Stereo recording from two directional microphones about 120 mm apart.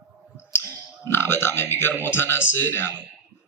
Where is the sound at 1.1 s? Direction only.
20° left (ahead or behind).